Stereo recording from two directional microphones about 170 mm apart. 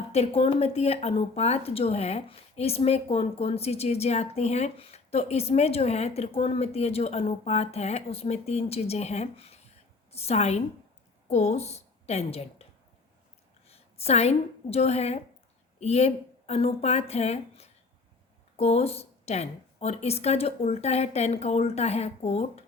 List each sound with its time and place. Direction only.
0.1 s a woman's voice: 35° left (ahead or behind)
13.7 s a woman's voice: 35° left (ahead or behind)